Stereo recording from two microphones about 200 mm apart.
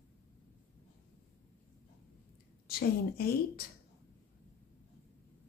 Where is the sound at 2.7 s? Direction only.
50° left (ahead or behind).